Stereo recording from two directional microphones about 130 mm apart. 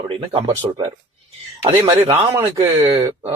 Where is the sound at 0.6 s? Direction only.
35° right (ahead or behind).